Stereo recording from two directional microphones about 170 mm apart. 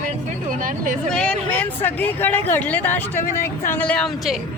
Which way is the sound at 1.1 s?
5° left (ahead or behind).